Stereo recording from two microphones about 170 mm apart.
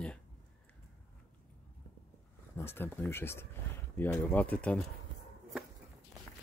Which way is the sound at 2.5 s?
15° left (ahead or behind).